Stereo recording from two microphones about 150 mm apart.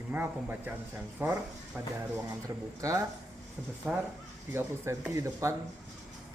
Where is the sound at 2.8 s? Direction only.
20° right (ahead or behind).